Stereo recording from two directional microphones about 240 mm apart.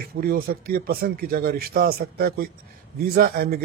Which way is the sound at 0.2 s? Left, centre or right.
Right.